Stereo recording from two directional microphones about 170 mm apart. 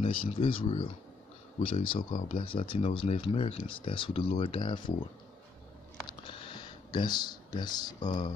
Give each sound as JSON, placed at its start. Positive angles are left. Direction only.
{"t": 0.0, "sound": "speech", "side_deg": 35}
{"t": 1.6, "sound": "speech", "side_deg": 30}
{"t": 2.0, "sound": "speech", "side_deg": 55}
{"t": 2.3, "sound": "speech", "side_deg": 30}
{"t": 6.0, "sound": "a sound", "side_deg": 30}